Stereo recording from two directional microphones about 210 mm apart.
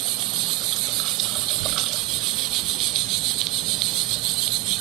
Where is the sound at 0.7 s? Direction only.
Centre (ahead or behind).